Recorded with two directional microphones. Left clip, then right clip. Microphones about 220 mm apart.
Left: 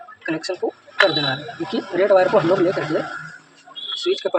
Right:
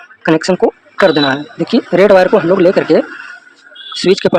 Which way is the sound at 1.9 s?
50° right (ahead or behind).